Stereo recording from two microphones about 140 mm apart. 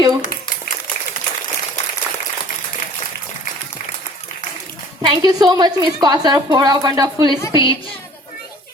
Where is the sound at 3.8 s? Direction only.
55° left (ahead or behind).